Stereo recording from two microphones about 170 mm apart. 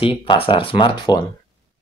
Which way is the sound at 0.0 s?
30° left (ahead or behind).